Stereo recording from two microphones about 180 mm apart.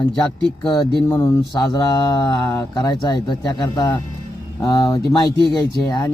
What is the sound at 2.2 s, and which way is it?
Speech, 20° left (ahead or behind).